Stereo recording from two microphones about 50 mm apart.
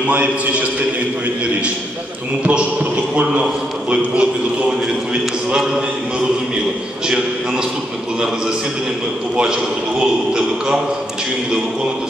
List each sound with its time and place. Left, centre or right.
0.1 s a man's voice: right
3.9 s a man's voice: right
9.4 s a man's voice: centre